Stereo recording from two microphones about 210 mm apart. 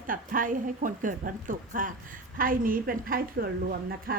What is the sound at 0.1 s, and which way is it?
A woman's voice, 40° right (ahead or behind).